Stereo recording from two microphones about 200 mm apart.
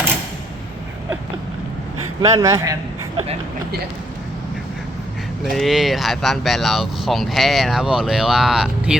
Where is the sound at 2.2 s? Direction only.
15° right (ahead or behind).